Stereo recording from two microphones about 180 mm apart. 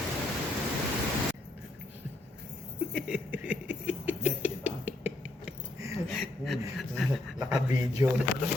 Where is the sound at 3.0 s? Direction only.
5° right (ahead or behind).